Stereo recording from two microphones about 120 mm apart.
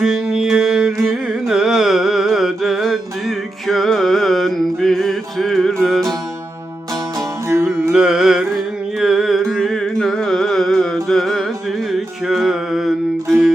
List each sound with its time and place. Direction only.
0.0 s music: centre (ahead or behind)
1.0 s carnatic music: centre (ahead or behind)
5.8 s music: 5° left (ahead or behind)
7.2 s music: 25° right (ahead or behind)
7.9 s music: 5° right (ahead or behind)